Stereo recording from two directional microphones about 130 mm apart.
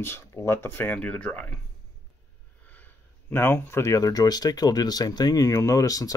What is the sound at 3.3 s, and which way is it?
Speech, 20° left (ahead or behind).